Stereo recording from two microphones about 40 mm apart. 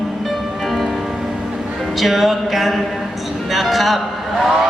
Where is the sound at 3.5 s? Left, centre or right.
Centre.